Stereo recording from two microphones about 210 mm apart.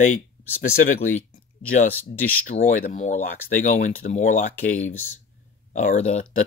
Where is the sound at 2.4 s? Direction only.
40° left (ahead or behind).